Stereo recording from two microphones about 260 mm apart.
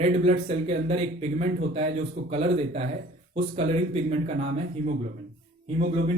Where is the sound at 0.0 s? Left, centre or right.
Right.